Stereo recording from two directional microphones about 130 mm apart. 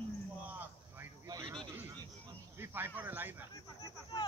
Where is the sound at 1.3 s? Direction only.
30° right (ahead or behind).